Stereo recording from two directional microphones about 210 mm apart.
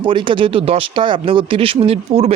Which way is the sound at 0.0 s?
25° right (ahead or behind).